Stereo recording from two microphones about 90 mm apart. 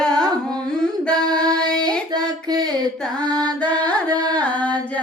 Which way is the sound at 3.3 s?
45° right (ahead or behind).